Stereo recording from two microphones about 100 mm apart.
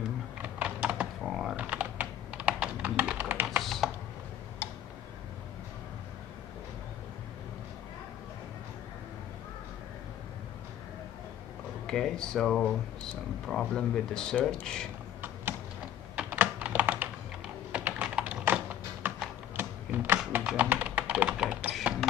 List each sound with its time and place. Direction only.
0.4 s typing: 15° right (ahead or behind)
1.6 s typing: 15° right (ahead or behind)
3.6 s typing: centre (ahead or behind)
4.6 s tick-tock: 20° left (ahead or behind)
11.8 s speech: 5° left (ahead or behind)
16.3 s computer keyboard: 15° right (ahead or behind)
17.7 s typing: 20° right (ahead or behind)
20.3 s tap: 15° right (ahead or behind)